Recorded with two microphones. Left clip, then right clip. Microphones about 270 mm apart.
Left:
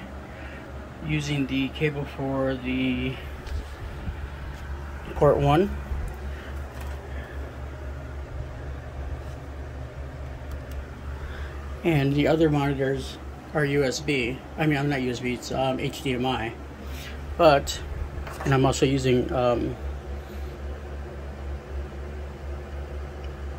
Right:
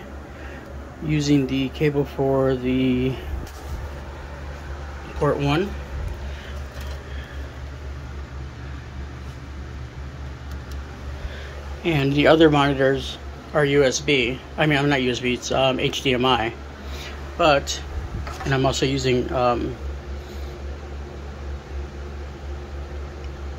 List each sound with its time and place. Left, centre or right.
1.0 s speech: centre
2.4 s mantra: right
5.2 s speech: centre
11.8 s a man's voice: centre
17.0 s a sound: centre
18.4 s speech: centre